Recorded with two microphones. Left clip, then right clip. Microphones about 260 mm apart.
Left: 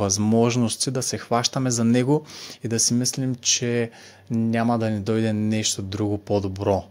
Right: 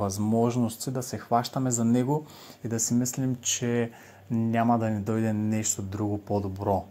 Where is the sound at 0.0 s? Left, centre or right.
Left.